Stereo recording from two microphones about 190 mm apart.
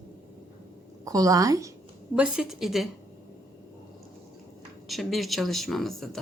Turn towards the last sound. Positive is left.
turn(degrees=0)  # may be behind; listen again after turning